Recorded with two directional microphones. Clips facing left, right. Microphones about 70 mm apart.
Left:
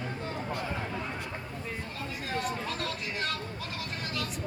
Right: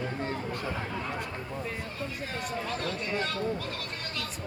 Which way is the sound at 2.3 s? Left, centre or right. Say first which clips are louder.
Left 1 dB; centre.